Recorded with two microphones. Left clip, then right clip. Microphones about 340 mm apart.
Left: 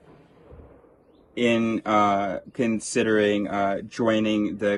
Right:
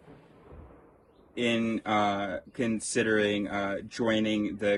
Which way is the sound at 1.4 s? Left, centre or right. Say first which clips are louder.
Left 6 dB; left.